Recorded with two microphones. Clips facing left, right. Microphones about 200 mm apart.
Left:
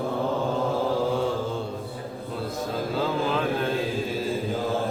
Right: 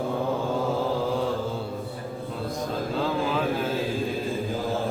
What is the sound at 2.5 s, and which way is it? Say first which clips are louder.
Mantra: left 1 dB; centre (ahead or behind).